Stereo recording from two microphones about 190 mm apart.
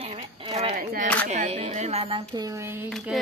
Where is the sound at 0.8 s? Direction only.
45° right (ahead or behind).